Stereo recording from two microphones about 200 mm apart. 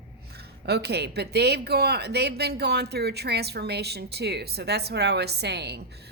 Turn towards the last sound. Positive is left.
turn(degrees=-55)  # may be behind; listen again after turning